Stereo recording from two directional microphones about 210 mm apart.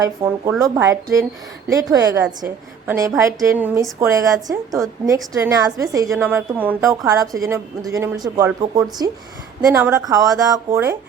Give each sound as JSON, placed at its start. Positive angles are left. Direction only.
{"t": 0.0, "sound": "a woman's voice", "side_deg": -15}